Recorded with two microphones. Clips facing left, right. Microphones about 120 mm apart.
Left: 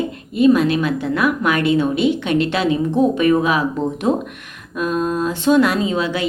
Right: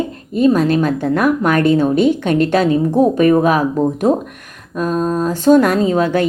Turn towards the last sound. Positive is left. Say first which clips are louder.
# right 5 dB
turn(degrees=-45)  # may be behind; listen again after turning